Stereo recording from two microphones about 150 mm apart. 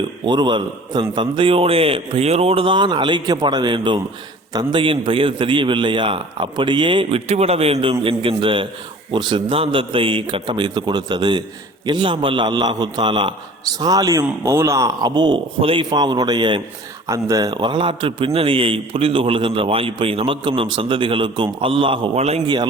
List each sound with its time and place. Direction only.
0.3 s a man's voice: 30° right (ahead or behind); by 22.4 s 45° right (ahead or behind)